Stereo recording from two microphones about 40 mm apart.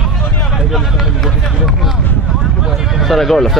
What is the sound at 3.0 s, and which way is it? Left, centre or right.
Speech, centre.